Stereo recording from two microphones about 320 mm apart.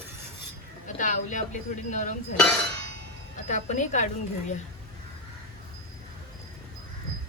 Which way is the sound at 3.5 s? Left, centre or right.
Left.